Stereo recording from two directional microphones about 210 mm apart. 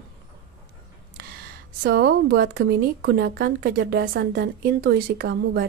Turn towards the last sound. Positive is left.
turn(degrees=-50)  # may be behind; listen again after turning